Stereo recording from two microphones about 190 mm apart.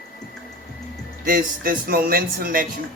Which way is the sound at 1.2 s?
45° right (ahead or behind).